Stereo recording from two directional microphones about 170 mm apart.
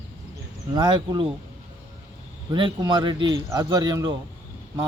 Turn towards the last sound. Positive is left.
turn(degrees=-25)  # may be behind; listen again after turning